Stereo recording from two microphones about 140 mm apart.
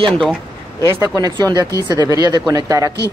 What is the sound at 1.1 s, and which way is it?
Speech, 30° right (ahead or behind).